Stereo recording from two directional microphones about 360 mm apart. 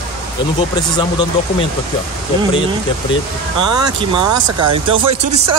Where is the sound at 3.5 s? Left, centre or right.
Centre.